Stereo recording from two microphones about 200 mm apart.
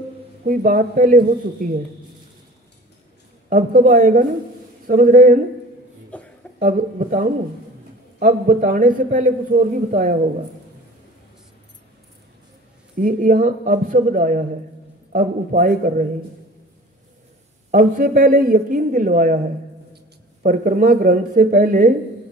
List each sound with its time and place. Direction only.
0.4 s speech: 40° right (ahead or behind)
3.4 s a man's voice: 40° right (ahead or behind)
6.1 s a sound: 5° left (ahead or behind)
6.6 s a man's voice: 40° right (ahead or behind)
13.0 s a man's voice: 40° right (ahead or behind)
17.6 s speech: 45° right (ahead or behind)
20.4 s speech: 40° right (ahead or behind)